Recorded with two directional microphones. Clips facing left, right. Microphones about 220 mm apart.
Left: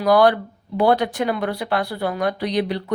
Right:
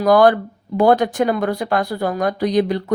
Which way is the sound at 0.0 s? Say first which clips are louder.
Right 3 dB; 45° right (ahead or behind).